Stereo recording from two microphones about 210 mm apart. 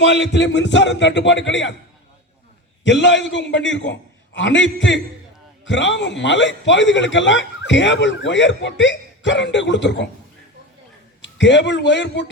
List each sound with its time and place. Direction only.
0.0 s speech: 55° left (ahead or behind)
2.8 s speech: 60° left (ahead or behind)
11.2 s a man's voice: 60° left (ahead or behind)